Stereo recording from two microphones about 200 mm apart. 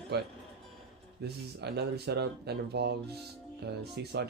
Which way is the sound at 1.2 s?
55° right (ahead or behind).